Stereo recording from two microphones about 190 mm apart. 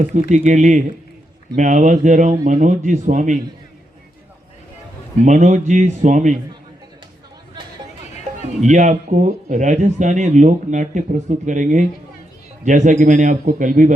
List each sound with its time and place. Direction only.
0.1 s a man's voice: 40° right (ahead or behind)
5.2 s a man's voice: 40° right (ahead or behind)
8.6 s a man's voice: 40° right (ahead or behind)